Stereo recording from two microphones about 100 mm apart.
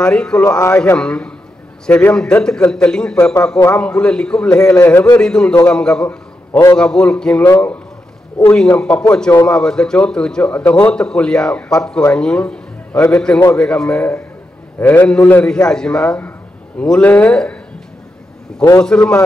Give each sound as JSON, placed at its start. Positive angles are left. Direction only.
{"t": 0.0, "sound": "a man's voice", "side_deg": 5}
{"t": 0.5, "sound": "a man's voice", "side_deg": 30}
{"t": 0.9, "sound": "a man's voice", "side_deg": 10}
{"t": 7.4, "sound": "a man's voice", "side_deg": 20}
{"t": 18.8, "sound": "a man's voice", "side_deg": 10}